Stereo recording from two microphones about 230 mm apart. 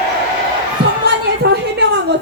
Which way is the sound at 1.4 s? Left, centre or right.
Right.